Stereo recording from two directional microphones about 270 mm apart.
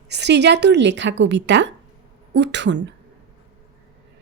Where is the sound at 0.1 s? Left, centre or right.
Right.